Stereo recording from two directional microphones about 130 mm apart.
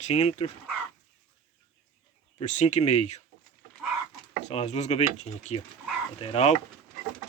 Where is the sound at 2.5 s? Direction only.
65° left (ahead or behind).